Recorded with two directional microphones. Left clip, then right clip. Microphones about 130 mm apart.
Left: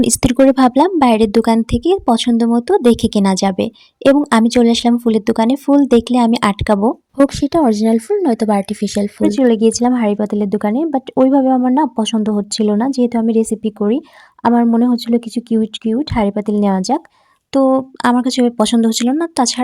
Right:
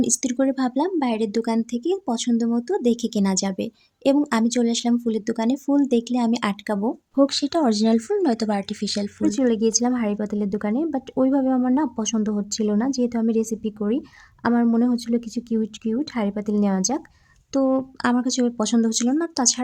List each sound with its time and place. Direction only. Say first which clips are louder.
0.0 s speech: left 11 dB; 55° left (ahead or behind)
7.3 s speech: left 7 dB; 30° left (ahead or behind)